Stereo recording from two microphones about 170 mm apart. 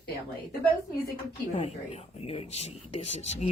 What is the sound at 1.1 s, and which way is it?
Speech, 35° left (ahead or behind).